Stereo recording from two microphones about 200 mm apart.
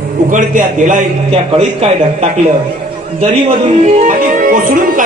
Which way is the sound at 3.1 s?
35° right (ahead or behind).